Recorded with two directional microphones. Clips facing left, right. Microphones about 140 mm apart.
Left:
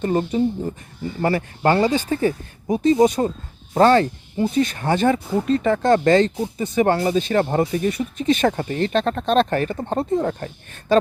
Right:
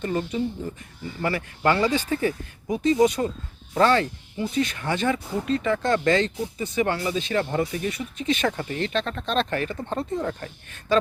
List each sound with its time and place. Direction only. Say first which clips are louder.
0.0 s speech: left 6 dB; 35° left (ahead or behind)